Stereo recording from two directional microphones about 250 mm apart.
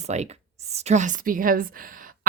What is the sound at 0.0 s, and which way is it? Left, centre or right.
A woman's voice, right.